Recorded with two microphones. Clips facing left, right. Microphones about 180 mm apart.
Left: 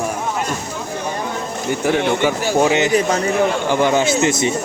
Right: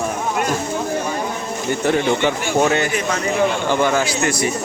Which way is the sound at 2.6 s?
15° left (ahead or behind).